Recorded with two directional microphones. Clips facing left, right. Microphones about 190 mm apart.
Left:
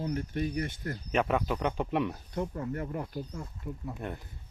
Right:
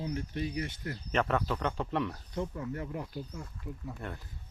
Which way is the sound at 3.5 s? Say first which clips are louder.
Left 3 dB; 20° left (ahead or behind).